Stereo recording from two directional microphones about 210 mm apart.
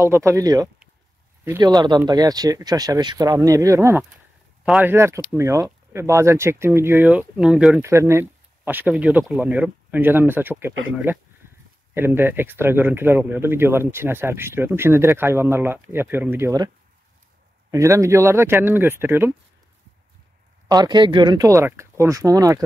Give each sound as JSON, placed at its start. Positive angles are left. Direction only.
{"t": 0.0, "sound": "speech", "side_deg": -15}
{"t": 20.6, "sound": "speech", "side_deg": -20}